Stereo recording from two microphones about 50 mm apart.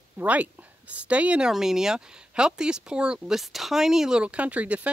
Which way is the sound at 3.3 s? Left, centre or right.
Centre.